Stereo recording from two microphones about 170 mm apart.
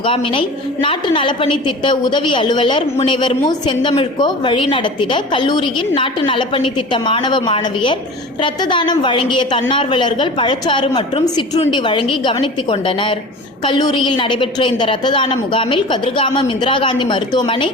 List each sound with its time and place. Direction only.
0.0 s a woman's voice: 30° left (ahead or behind)